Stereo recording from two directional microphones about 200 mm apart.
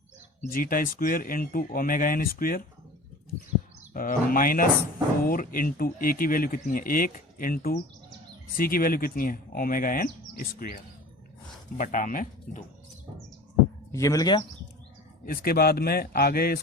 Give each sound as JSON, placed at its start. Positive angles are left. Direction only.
{"t": 0.5, "sound": "speech", "side_deg": 45}
{"t": 3.9, "sound": "speech", "side_deg": 45}
{"t": 11.8, "sound": "speech", "side_deg": 40}
{"t": 13.9, "sound": "speech", "side_deg": 15}
{"t": 15.3, "sound": "speech", "side_deg": 50}